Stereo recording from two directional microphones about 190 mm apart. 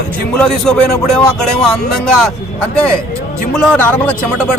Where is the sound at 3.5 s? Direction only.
5° left (ahead or behind).